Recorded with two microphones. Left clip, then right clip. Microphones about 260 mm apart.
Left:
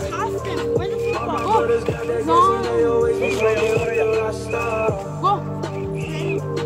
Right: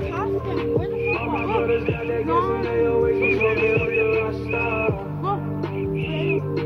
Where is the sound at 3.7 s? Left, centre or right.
Left.